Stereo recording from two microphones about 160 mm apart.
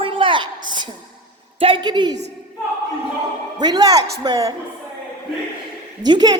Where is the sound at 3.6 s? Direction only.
25° right (ahead or behind).